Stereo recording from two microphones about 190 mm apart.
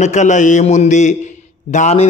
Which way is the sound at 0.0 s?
40° left (ahead or behind).